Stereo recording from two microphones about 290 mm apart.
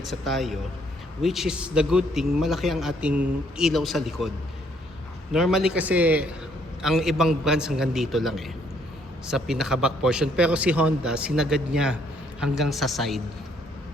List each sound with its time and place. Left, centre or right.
0.0 s a man's voice: centre
5.3 s a man's voice: centre